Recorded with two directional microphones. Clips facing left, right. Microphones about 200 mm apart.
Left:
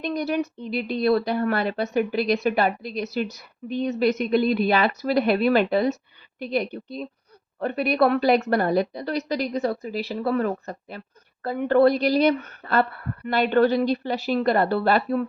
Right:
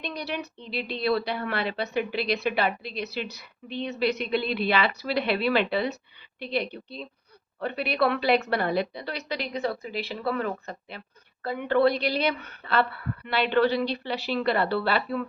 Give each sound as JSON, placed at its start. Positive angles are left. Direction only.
{"t": 0.0, "sound": "speech", "side_deg": 45}